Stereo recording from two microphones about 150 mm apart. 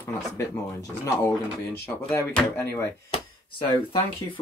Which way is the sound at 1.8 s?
15° left (ahead or behind).